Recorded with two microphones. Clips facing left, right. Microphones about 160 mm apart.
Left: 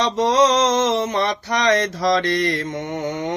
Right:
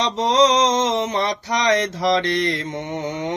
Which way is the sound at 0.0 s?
20° right (ahead or behind).